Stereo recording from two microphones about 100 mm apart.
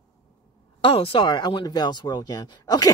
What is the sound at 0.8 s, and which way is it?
Speech, 65° left (ahead or behind).